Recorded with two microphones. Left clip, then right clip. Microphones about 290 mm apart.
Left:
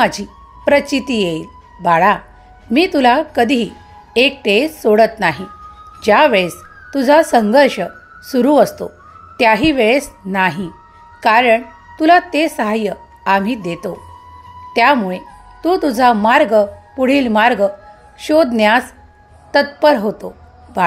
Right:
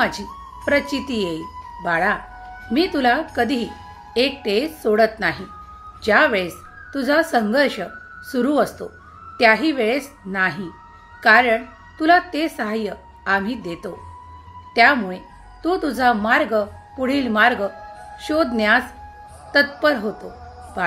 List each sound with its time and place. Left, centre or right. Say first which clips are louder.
0.0 s a woman's voice: left 6 dB; left